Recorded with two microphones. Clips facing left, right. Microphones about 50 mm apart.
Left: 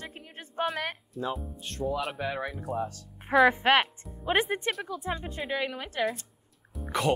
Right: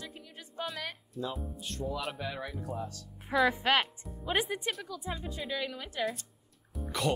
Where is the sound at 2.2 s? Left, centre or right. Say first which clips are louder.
Left 6 dB; left.